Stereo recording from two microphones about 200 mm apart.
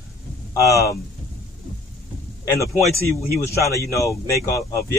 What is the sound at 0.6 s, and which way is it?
Speech, 15° left (ahead or behind).